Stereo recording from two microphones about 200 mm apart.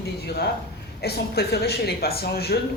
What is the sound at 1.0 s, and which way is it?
A woman's voice, 55° left (ahead or behind).